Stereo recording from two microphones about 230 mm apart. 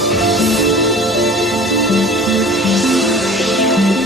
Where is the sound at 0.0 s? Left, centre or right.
Centre.